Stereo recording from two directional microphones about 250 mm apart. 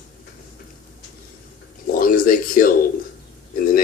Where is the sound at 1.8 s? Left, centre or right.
Left.